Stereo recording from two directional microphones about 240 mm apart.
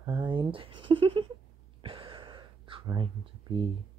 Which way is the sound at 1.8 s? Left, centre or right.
Right.